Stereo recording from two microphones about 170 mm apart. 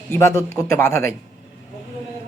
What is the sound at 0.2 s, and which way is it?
Speech, 15° left (ahead or behind).